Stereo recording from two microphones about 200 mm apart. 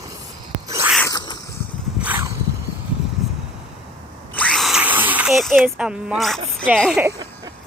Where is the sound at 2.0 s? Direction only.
10° right (ahead or behind).